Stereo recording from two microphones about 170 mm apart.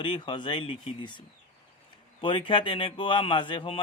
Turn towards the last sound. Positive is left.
turn(degrees=30)  # may be behind; listen again after turning